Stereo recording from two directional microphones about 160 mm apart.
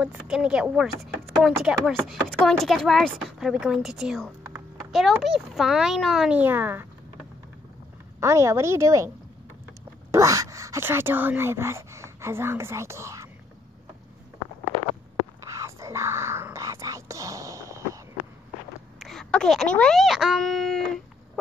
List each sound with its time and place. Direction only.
0.0 s speech: 5° right (ahead or behind)
4.4 s a sound: 15° right (ahead or behind)
4.9 s speech: centre (ahead or behind)
8.2 s speech: 15° right (ahead or behind)
10.1 s speech: 20° right (ahead or behind)
15.4 s whispering: 20° right (ahead or behind)
18.9 s speech: centre (ahead or behind)